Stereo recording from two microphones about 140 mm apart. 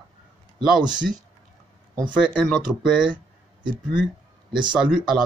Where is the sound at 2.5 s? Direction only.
5° right (ahead or behind).